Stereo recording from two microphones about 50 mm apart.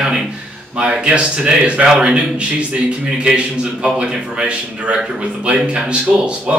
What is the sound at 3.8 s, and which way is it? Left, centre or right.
Speech, right.